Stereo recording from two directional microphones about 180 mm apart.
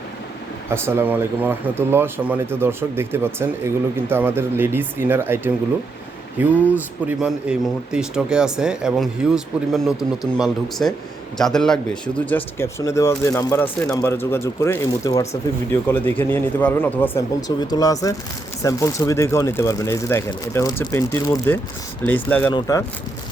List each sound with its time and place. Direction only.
0.7 s speech: 15° right (ahead or behind); by 17.2 s 10° left (ahead or behind)
17.6 s speech: 20° left (ahead or behind)